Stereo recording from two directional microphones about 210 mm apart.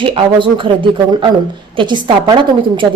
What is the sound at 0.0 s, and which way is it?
A woman's voice, 25° right (ahead or behind).